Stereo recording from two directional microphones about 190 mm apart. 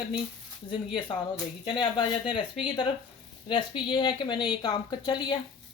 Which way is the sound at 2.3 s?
25° left (ahead or behind).